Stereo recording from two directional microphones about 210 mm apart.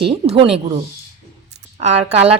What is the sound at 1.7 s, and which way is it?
Speech, 30° right (ahead or behind).